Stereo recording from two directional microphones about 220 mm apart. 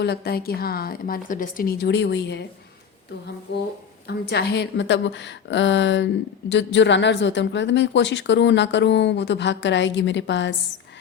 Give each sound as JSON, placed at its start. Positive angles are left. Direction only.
{"t": 0.0, "sound": "a woman's voice", "side_deg": 45}
{"t": 3.5, "sound": "a woman's voice", "side_deg": 50}